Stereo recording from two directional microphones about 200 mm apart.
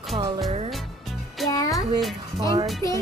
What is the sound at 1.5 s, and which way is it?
Music, 15° left (ahead or behind).